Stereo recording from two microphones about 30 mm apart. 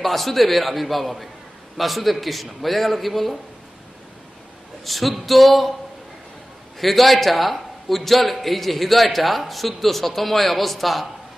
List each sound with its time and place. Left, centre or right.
0.0 s a man's voice: centre
4.8 s a man's voice: centre
6.8 s a man's voice: centre